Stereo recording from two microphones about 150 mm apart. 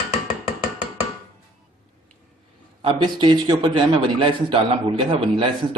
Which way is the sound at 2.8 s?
30° right (ahead or behind).